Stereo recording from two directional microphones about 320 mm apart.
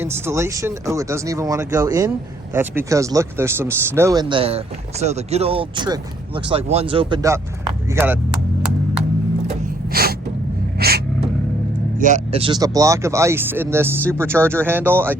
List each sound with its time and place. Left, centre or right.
0.0 s speech: centre
9.9 s gasp: right
11.9 s speech: right; by 15.1 s centre